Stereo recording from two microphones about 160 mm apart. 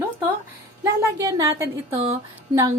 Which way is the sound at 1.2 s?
20° right (ahead or behind).